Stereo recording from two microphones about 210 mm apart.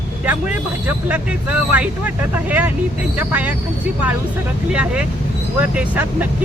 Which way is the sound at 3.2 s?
10° right (ahead or behind).